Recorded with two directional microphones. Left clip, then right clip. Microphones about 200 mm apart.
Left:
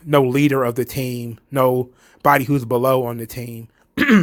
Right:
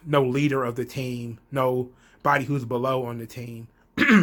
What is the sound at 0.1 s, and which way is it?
Speech, 40° left (ahead or behind).